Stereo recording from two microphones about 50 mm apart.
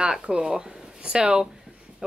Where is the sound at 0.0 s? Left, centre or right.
Centre.